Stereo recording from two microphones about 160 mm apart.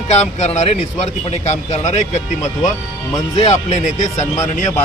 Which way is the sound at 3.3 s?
45° left (ahead or behind).